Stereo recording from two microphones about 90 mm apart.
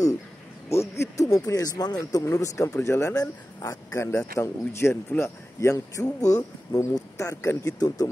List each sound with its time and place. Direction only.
0.7 s speech: 30° left (ahead or behind)